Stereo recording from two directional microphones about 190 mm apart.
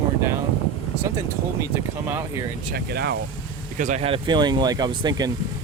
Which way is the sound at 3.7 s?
40° right (ahead or behind).